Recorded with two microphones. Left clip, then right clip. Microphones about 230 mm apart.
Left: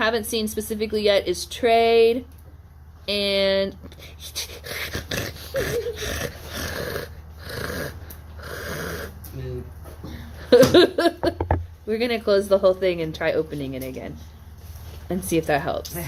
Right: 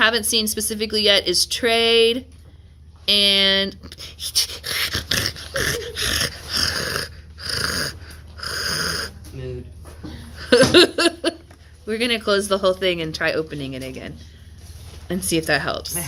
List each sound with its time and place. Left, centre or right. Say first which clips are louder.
0.0 s speech: right 5 dB; right
3.1 s a sound: right 5 dB; right
10.4 s laughter: right 1 dB; right
11.9 s speech: right 1 dB; right